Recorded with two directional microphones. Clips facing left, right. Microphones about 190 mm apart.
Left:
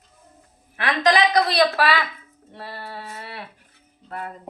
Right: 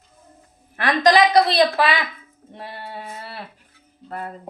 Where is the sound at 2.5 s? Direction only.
20° right (ahead or behind).